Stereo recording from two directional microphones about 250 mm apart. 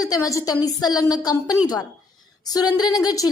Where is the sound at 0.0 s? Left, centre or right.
Centre.